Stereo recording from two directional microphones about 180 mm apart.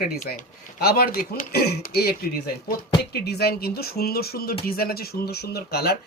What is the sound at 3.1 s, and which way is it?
Speech, 65° left (ahead or behind).